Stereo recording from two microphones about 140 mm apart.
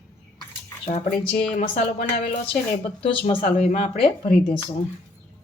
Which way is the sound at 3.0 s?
40° left (ahead or behind).